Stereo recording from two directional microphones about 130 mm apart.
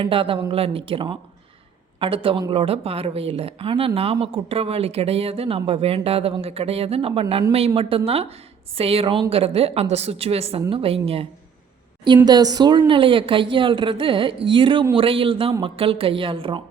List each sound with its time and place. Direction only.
0.0 s a woman's voice: 45° right (ahead or behind)
12.0 s a woman's voice: 35° right (ahead or behind)